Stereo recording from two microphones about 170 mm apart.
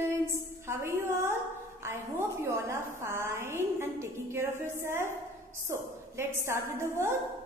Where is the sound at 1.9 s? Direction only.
15° right (ahead or behind).